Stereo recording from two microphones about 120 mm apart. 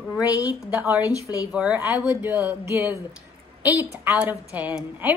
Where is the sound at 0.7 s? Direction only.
15° right (ahead or behind).